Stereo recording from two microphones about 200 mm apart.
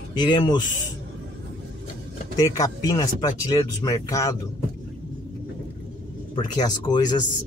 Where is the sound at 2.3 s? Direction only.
15° left (ahead or behind).